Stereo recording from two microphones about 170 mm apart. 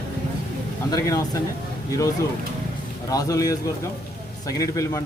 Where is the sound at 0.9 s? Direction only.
20° left (ahead or behind).